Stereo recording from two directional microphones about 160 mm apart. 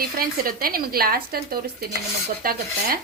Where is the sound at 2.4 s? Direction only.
65° right (ahead or behind).